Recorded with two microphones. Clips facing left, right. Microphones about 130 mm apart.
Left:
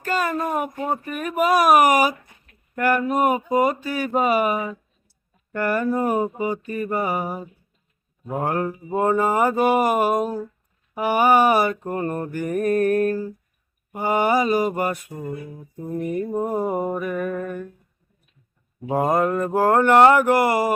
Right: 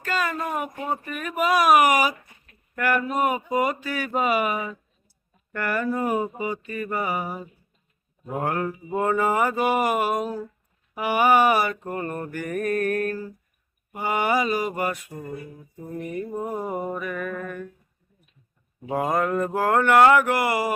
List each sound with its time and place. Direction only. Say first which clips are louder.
0.0 s speech: left 3 dB; 40° left (ahead or behind)
8.3 s mantra: left 2 dB; 25° left (ahead or behind)
9.1 s speech: left 2 dB; 35° left (ahead or behind)
15.1 s mantra: left 4 dB; 20° left (ahead or behind)
16.1 s speech: left 5 dB; 35° left (ahead or behind)
18.9 s speech: left 3 dB; 30° left (ahead or behind)